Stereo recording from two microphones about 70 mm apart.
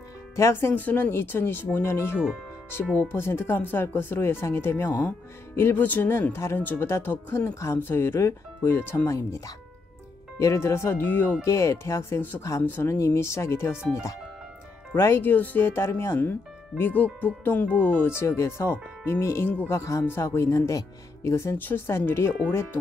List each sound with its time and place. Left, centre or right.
0.4 s speech: left
6.6 s speech: left
10.4 s speech: left
11.4 s speech: left
12.9 s speech: left
15.0 s speech: left
18.2 s speech: left
21.5 s speech: left